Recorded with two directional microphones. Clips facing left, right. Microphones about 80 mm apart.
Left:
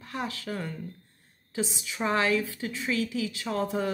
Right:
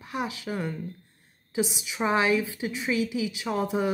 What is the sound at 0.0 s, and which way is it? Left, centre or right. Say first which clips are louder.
A woman's voice: right 2 dB; centre.